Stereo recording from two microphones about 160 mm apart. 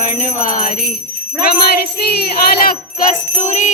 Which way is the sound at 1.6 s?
90° left.